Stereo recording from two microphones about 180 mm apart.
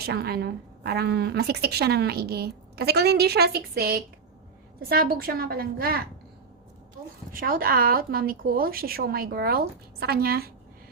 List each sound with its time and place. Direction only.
0.0 s a woman's voice: 60° right (ahead or behind)
7.3 s a woman's voice: 55° right (ahead or behind)